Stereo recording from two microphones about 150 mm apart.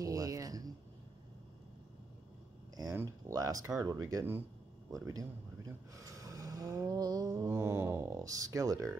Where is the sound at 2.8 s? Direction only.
20° right (ahead or behind).